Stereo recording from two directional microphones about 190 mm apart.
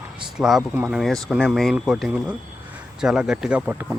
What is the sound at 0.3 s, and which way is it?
Speech, centre (ahead or behind).